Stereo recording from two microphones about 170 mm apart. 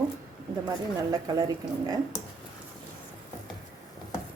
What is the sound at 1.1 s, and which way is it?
Speech, 20° right (ahead or behind).